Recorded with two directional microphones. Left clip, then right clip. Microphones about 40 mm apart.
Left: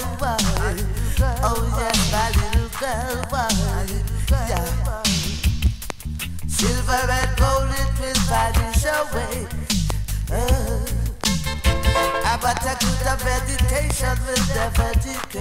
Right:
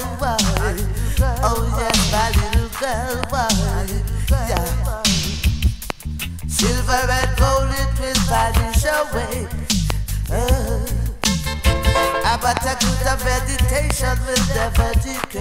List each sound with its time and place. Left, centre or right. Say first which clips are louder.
0.2 s music: right 3 dB; left